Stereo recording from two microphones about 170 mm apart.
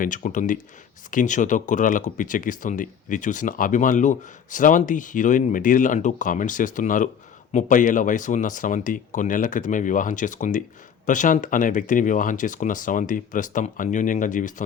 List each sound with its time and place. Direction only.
0.0 s speech: 50° left (ahead or behind)